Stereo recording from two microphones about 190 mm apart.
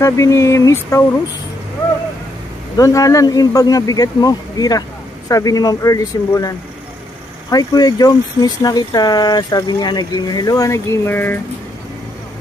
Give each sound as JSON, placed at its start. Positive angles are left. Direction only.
{"t": 0.0, "sound": "speech", "side_deg": 15}
{"t": 2.8, "sound": "speech", "side_deg": 15}
{"t": 7.5, "sound": "speech", "side_deg": 20}